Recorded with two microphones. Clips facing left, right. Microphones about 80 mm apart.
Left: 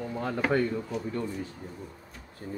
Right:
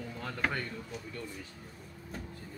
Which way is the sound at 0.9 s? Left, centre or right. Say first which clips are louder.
Left 10 dB; left.